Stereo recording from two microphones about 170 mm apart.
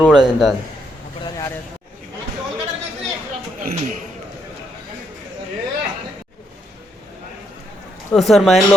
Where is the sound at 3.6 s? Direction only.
50° right (ahead or behind).